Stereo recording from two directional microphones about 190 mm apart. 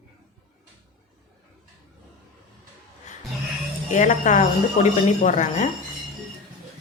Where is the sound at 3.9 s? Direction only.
40° left (ahead or behind).